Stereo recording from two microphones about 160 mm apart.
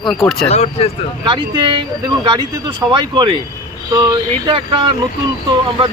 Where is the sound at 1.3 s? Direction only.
30° right (ahead or behind).